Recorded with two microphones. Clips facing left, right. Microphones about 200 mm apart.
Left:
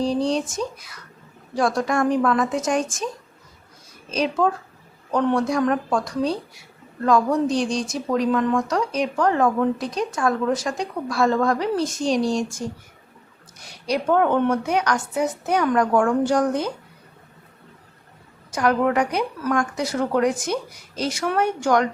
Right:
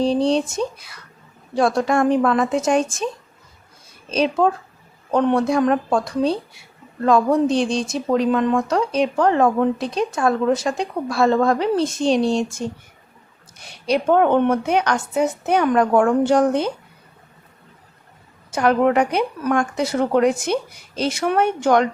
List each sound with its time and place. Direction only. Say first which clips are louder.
0.3 s speech: right 4 dB; 30° right (ahead or behind)
4.1 s speech: right 3 dB; 30° right (ahead or behind)
13.8 s speech: right 3 dB; 25° right (ahead or behind)
18.5 s speech: right 3 dB; 25° right (ahead or behind)